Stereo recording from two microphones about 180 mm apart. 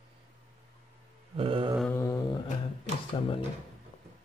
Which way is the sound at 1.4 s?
30° right (ahead or behind).